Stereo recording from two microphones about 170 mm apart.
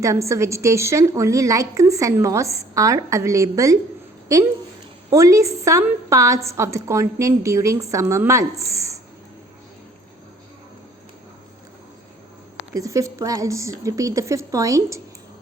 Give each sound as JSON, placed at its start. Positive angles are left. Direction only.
{"t": 0.0, "sound": "a woman's voice", "side_deg": -20}
{"t": 5.1, "sound": "a woman's voice", "side_deg": -20}
{"t": 12.7, "sound": "speech", "side_deg": -20}